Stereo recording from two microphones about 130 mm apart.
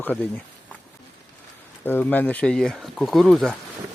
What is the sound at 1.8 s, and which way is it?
Speech, 15° left (ahead or behind).